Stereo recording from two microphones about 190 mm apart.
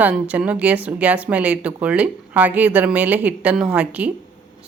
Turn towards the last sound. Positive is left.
turn(degrees=-5)  # may be behind; listen again after turning